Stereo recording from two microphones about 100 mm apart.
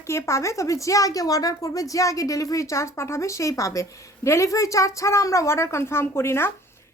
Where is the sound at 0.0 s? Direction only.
30° left (ahead or behind).